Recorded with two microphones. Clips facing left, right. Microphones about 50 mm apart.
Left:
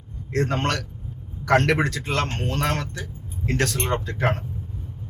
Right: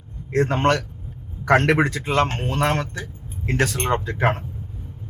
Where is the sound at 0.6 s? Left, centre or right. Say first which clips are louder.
Right 6 dB; centre.